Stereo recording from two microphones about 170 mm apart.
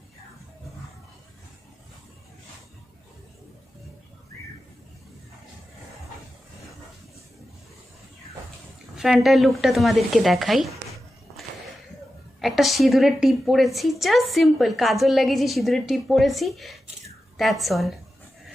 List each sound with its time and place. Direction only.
8.9 s a woman's voice: centre (ahead or behind)
12.4 s a woman's voice: centre (ahead or behind)